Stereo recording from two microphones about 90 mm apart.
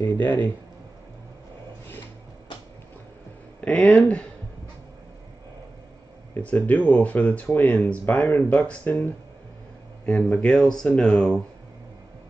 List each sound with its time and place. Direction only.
0.0 s speech: 20° left (ahead or behind)
3.8 s speech: centre (ahead or behind)
6.4 s speech: 15° left (ahead or behind)
10.0 s speech: 10° left (ahead or behind)